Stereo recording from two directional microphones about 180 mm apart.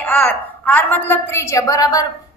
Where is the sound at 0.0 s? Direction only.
10° left (ahead or behind).